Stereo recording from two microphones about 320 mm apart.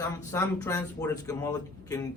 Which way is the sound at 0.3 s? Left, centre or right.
Centre.